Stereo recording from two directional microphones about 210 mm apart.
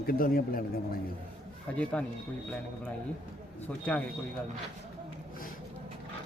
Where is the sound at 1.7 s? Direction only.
5° left (ahead or behind).